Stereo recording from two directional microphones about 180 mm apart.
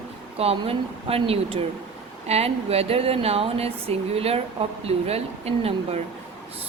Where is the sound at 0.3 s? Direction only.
35° right (ahead or behind).